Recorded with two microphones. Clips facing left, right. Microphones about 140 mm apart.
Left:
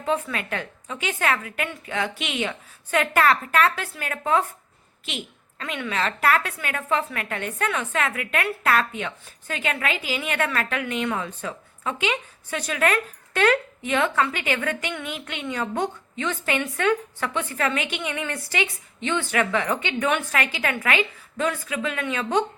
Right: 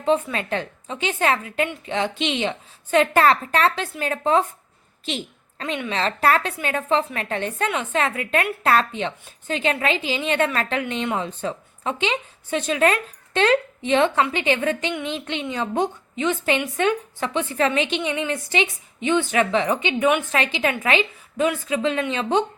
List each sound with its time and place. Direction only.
0.0 s a woman's voice: 25° right (ahead or behind)